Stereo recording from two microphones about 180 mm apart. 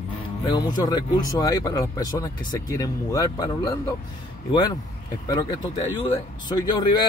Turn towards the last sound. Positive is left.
turn(degrees=25)  # may be behind; listen again after turning